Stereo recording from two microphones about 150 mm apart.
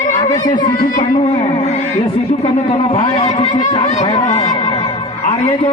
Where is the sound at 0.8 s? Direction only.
65° left (ahead or behind).